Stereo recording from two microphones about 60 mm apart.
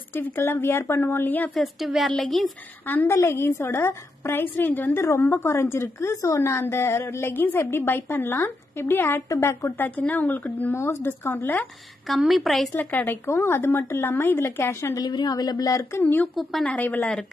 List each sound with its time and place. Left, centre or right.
0.1 s a woman's voice: left
1.5 s speech: centre
3.3 s a woman's voice: left
3.6 s a woman's voice: left
4.9 s a woman's voice: left
9.8 s speech: left
10.7 s a woman's voice: left
12.2 s speech: centre
12.7 s a woman's voice: left
15.0 s speech: left
16.6 s speech: left
17.0 s speech: centre